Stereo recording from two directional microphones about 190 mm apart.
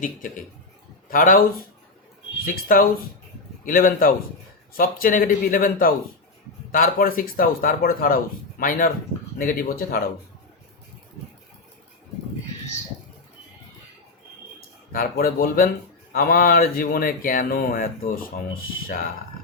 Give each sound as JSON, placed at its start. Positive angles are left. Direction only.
{"t": 1.1, "sound": "speech", "side_deg": 50}
{"t": 2.7, "sound": "speech", "side_deg": 50}
{"t": 14.9, "sound": "speech", "side_deg": 50}